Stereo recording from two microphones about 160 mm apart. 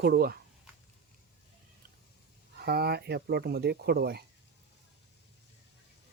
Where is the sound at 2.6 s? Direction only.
80° right.